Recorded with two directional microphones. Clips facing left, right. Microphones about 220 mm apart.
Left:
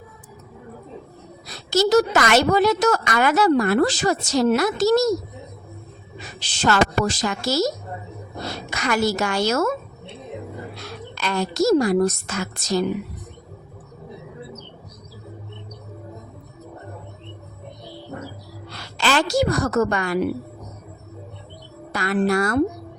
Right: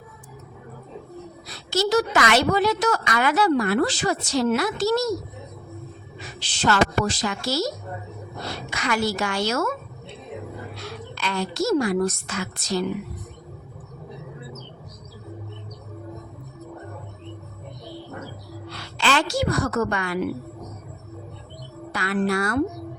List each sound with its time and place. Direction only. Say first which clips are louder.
1.5 s a woman's voice: left 4 dB; 40° left (ahead or behind)
6.4 s a woman's voice: left 2 dB; 45° left (ahead or behind)
11.1 s a woman's voice: left 3 dB; 45° left (ahead or behind)
18.7 s a woman's voice: left 2 dB; 40° left (ahead or behind)
21.9 s a woman's voice: left 3 dB; 45° left (ahead or behind)